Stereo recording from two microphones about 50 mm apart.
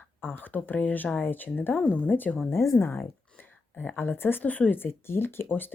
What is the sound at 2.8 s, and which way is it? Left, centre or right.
Speech, left.